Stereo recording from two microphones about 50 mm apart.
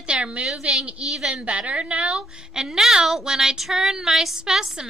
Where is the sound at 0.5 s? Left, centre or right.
Centre.